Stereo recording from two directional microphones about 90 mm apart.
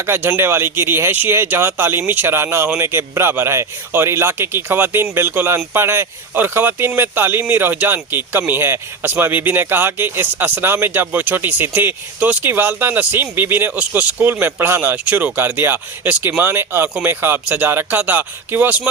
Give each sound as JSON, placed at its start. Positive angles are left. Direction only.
{"t": 0.0, "sound": "speech", "side_deg": -25}